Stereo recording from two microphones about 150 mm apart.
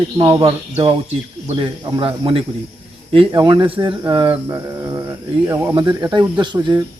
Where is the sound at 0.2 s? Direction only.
35° right (ahead or behind).